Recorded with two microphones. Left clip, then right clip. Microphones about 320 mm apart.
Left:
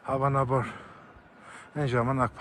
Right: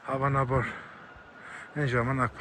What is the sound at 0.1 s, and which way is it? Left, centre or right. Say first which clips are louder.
Speech: left 1 dB; centre.